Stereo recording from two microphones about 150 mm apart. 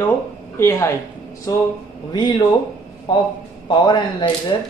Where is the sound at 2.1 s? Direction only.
30° left (ahead or behind).